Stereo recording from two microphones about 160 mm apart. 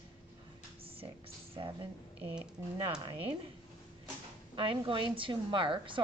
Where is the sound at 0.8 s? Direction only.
35° right (ahead or behind).